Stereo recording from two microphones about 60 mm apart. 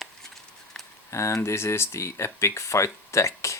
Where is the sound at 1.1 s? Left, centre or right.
Left.